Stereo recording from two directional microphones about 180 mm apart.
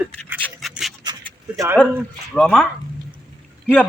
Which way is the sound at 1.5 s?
15° right (ahead or behind).